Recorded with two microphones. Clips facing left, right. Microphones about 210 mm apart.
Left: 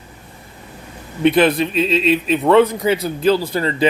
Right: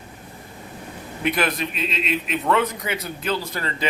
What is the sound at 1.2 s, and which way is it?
A man's voice, 30° left (ahead or behind).